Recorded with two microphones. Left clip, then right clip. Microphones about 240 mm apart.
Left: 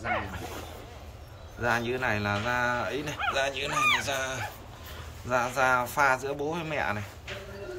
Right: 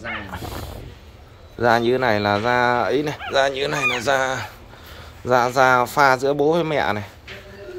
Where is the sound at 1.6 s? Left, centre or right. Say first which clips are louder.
Right 11 dB; right.